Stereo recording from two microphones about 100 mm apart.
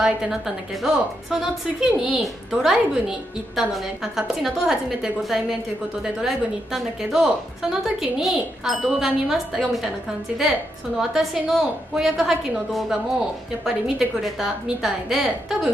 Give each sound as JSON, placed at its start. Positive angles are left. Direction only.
{"t": 0.8, "sound": "a woman's voice", "side_deg": -5}
{"t": 11.0, "sound": "a woman's voice", "side_deg": -5}